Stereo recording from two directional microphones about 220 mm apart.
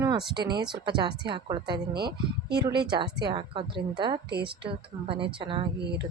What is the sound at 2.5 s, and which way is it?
Speech, 45° right (ahead or behind).